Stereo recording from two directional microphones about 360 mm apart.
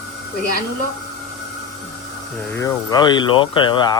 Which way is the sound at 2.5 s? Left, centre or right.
Centre.